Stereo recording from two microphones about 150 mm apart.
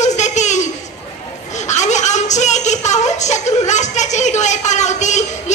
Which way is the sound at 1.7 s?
50° left (ahead or behind).